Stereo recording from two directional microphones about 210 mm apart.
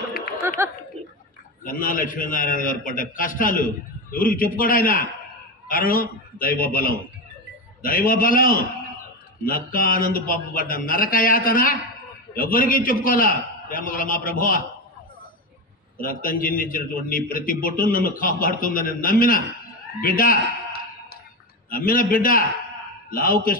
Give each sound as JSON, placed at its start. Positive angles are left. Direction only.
{"t": 1.0, "sound": "a sound", "side_deg": -30}
{"t": 1.6, "sound": "a man's voice", "side_deg": 40}
{"t": 16.0, "sound": "a man's voice", "side_deg": 40}
{"t": 21.6, "sound": "a man's voice", "side_deg": 45}